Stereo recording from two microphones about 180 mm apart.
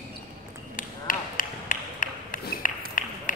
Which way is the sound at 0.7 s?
50° left (ahead or behind).